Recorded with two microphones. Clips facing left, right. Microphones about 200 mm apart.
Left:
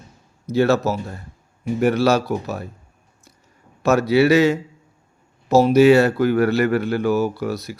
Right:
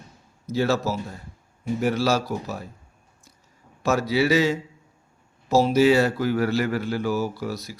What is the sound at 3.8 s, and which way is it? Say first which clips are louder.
Speech: left 6 dB; 65° left (ahead or behind).